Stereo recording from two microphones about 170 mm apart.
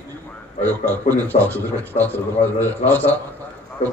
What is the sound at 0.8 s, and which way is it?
A man's voice, 10° left (ahead or behind).